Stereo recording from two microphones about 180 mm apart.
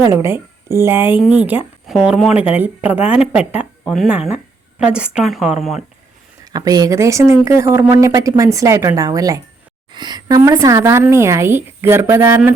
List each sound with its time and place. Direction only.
0.0 s speech: 15° right (ahead or behind)
6.4 s speech: 20° right (ahead or behind)